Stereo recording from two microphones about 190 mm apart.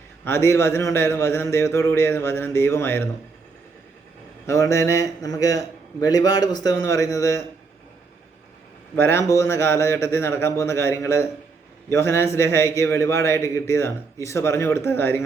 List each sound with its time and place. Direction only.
0.3 s a man's voice: 15° left (ahead or behind)
4.4 s a man's voice: 15° left (ahead or behind)
9.0 s a man's voice: 15° left (ahead or behind)